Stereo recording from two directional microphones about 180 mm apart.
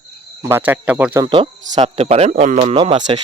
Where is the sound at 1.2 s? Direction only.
30° right (ahead or behind).